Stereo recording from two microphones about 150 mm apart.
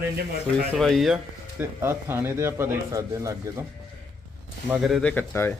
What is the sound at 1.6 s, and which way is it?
A man's voice, 15° right (ahead or behind).